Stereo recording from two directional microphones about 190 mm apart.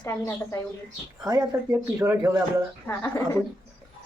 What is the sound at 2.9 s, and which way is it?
Speech, 15° left (ahead or behind).